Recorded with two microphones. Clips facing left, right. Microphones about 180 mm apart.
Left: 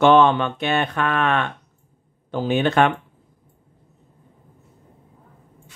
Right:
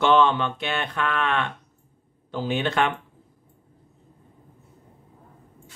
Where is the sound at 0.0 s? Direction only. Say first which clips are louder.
Left 5 dB; 50° left (ahead or behind).